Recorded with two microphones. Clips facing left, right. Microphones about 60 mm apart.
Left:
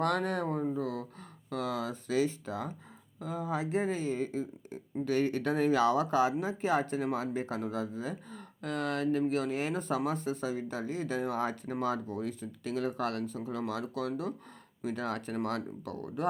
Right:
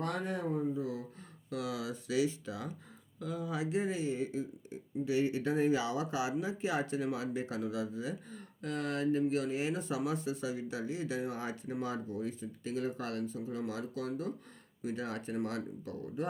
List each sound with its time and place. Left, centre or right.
0.0 s speech: left
0.6 s a sound: left
3.2 s speech: left